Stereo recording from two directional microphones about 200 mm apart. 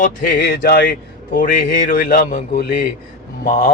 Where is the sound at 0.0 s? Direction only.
45° left (ahead or behind).